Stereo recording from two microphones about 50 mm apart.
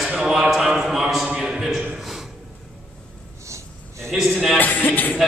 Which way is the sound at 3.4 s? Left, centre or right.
Right.